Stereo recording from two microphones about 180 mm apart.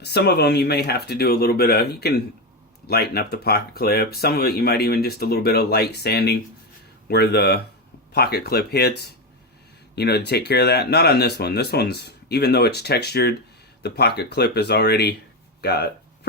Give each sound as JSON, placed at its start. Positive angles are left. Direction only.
{"t": 0.0, "sound": "speech", "side_deg": 65}